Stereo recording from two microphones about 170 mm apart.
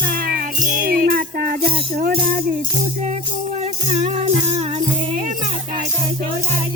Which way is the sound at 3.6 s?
45° right (ahead or behind).